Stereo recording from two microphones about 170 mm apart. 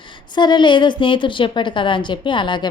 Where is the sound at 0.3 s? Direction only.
25° left (ahead or behind).